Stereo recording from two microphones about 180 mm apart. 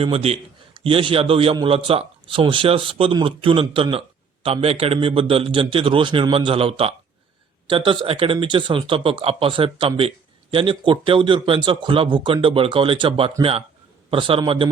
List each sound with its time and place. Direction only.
0.0 s a man's voice: 35° right (ahead or behind)
8.0 s a man's voice: 30° right (ahead or behind)